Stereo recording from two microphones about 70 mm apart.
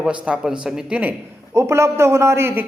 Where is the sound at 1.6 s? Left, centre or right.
Right.